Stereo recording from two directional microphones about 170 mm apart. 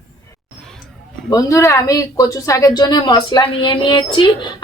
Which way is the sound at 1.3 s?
20° left (ahead or behind).